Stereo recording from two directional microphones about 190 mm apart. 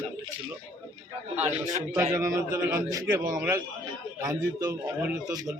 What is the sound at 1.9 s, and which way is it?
A man's voice, 15° right (ahead or behind).